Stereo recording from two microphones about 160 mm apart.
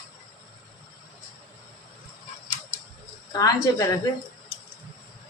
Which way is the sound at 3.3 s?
20° left (ahead or behind).